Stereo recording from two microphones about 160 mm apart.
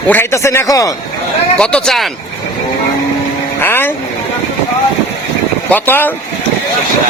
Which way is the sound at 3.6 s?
15° left (ahead or behind).